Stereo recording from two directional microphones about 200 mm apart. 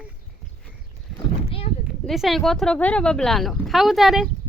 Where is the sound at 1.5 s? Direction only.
30° left (ahead or behind).